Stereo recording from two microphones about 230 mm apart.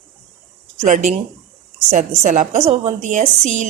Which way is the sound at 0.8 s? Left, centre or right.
Right.